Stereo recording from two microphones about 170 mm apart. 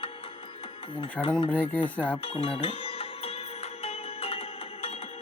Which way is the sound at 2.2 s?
35° left (ahead or behind).